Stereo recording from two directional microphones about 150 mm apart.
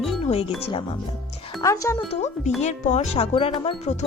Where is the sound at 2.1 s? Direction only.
50° left (ahead or behind).